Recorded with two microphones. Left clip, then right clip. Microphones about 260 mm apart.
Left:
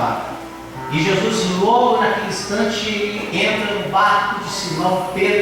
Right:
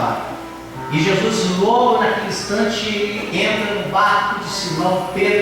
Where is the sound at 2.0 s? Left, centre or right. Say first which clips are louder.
Even; centre.